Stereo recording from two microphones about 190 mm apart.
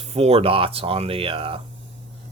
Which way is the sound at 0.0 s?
35° right (ahead or behind).